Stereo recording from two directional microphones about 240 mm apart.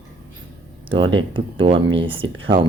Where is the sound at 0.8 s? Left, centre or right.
Right.